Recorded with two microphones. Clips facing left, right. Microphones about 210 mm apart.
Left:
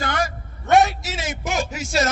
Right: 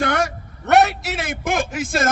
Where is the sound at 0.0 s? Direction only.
65° right (ahead or behind).